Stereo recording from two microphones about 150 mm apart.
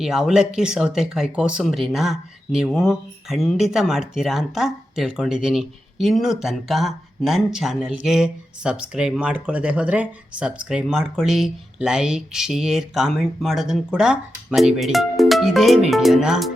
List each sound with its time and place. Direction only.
0.0 s speech: 5° right (ahead or behind)